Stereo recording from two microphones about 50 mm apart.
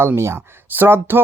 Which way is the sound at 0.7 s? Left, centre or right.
Right.